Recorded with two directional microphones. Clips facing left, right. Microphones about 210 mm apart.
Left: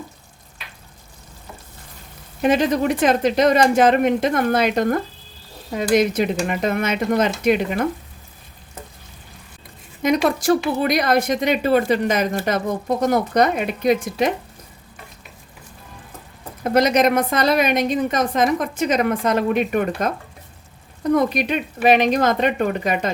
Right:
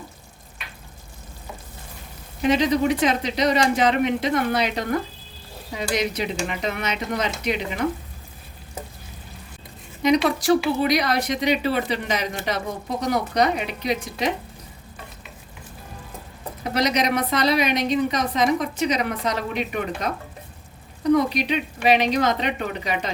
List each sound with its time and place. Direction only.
2.4 s a woman's voice: 50° left (ahead or behind)
10.0 s a woman's voice: 50° left (ahead or behind)
16.6 s a woman's voice: 50° left (ahead or behind)